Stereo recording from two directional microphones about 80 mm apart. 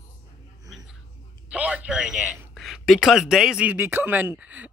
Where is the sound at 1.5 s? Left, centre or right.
Centre.